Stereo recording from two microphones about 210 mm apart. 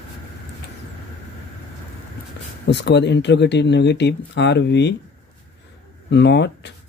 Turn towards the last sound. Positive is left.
turn(degrees=55)  # may be behind; listen again after turning